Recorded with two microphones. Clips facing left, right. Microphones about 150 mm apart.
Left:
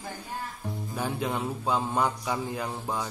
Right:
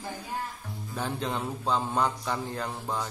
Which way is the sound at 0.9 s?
10° left (ahead or behind).